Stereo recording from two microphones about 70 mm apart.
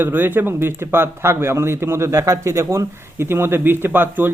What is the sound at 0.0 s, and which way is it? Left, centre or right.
Speech, right.